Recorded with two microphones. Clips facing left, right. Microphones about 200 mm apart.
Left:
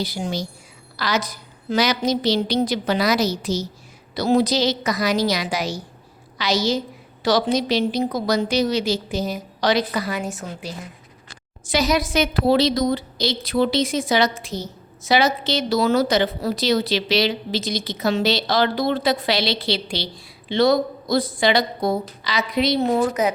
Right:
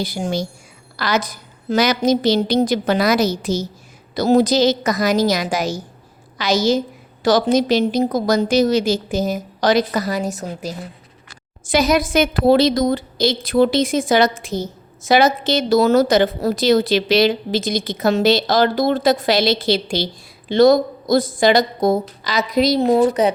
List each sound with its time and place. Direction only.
0.0 s a woman's voice: 50° right (ahead or behind)
11.6 s a woman's voice: 50° right (ahead or behind); by 23.3 s 30° right (ahead or behind)